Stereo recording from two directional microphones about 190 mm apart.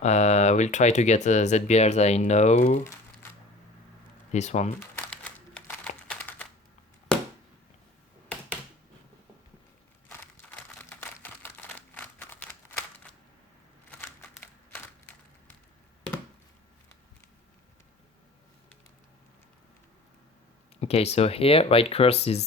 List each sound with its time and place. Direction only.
0.0 s speech: 35° left (ahead or behind)
4.3 s speech: 40° left (ahead or behind)
4.8 s crumpling: 10° left (ahead or behind)
6.1 s a sound: 5° left (ahead or behind)
10.1 s a sound: 10° left (ahead or behind)
20.7 s speech: 35° left (ahead or behind)